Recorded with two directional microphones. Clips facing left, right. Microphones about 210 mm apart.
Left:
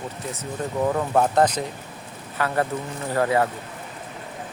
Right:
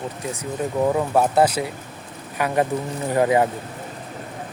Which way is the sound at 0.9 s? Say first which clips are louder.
Even; 10° right (ahead or behind).